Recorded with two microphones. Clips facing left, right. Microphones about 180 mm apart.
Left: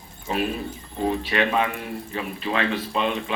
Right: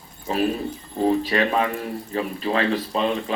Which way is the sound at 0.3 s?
35° right (ahead or behind).